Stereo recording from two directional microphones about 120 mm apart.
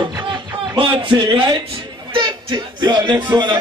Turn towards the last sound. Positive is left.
turn(degrees=-35)  # may be behind; listen again after turning